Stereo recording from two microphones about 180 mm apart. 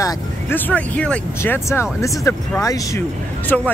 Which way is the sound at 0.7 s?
5° left (ahead or behind).